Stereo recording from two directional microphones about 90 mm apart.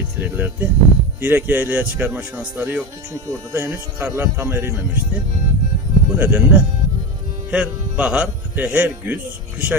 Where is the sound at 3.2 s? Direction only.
35° right (ahead or behind).